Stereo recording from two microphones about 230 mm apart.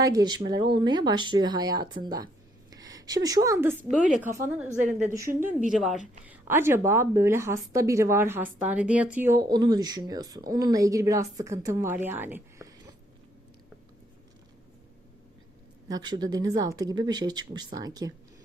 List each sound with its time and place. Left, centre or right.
0.0 s a woman's voice: centre
15.9 s a woman's voice: centre